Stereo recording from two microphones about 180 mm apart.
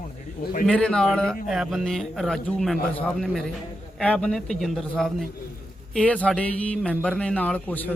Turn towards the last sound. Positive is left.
turn(degrees=10)  # may be behind; listen again after turning